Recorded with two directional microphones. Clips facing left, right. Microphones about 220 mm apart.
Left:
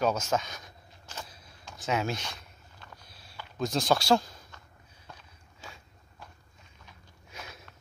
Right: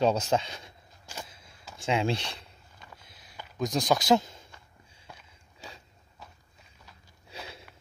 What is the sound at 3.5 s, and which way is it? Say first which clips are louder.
Speech: even; 15° right (ahead or behind).